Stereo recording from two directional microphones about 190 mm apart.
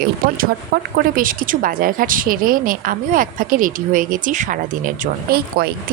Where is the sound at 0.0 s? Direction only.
50° right (ahead or behind).